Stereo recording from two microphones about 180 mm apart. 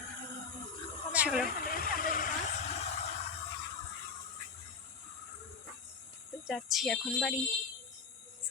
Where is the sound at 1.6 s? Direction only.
50° left (ahead or behind).